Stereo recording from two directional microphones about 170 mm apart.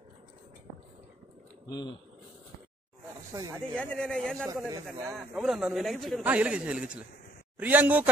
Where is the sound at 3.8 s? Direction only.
5° left (ahead or behind).